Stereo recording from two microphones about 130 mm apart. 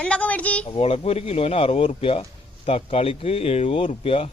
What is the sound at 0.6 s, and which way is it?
Speech, 45° left (ahead or behind).